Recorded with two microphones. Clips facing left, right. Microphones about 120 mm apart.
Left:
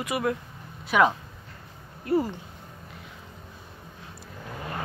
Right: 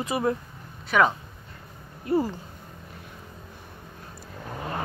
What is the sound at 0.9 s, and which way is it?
Speech, 5° left (ahead or behind).